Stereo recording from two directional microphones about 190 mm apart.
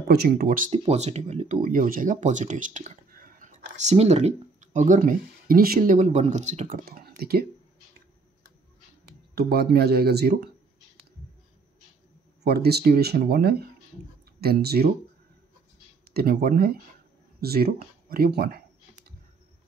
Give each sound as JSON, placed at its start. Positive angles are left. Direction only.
{"t": 0.1, "sound": "speech", "side_deg": -55}
{"t": 0.7, "sound": "speech", "side_deg": -35}
{"t": 9.4, "sound": "speech", "side_deg": -55}
{"t": 12.4, "sound": "speech", "side_deg": -55}
{"t": 16.1, "sound": "speech", "side_deg": -55}